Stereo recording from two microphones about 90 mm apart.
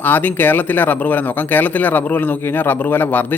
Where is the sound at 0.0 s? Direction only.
20° left (ahead or behind).